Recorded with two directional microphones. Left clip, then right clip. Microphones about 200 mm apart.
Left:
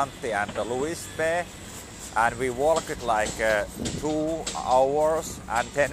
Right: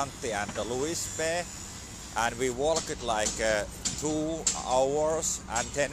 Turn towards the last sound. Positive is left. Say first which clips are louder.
# left 5 dB
turn(degrees=-15)  # may be behind; listen again after turning